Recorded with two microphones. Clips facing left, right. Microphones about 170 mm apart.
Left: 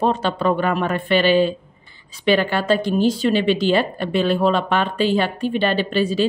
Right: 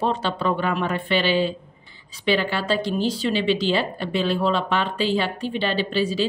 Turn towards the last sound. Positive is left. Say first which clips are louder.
# left 3 dB
turn(degrees=50)  # may be behind; listen again after turning